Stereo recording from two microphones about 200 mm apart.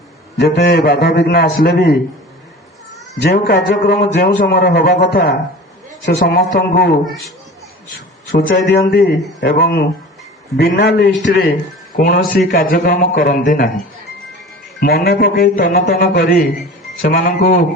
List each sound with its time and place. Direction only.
0.3 s a man's voice: 55° left (ahead or behind)
3.2 s a man's voice: 50° left (ahead or behind)
8.3 s a man's voice: 50° left (ahead or behind)
11.9 s a man's voice: 45° left (ahead or behind)
14.8 s a man's voice: 50° left (ahead or behind)